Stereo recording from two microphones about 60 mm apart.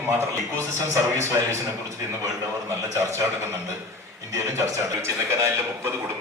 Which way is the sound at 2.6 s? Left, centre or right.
Right.